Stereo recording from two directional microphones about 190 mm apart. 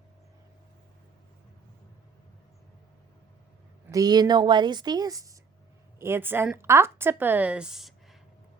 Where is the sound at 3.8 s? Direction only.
20° right (ahead or behind).